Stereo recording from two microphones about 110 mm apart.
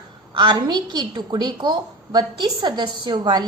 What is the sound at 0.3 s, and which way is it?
A woman's voice, 45° right (ahead or behind).